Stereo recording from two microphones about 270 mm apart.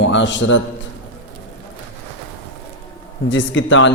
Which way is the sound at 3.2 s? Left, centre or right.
Left.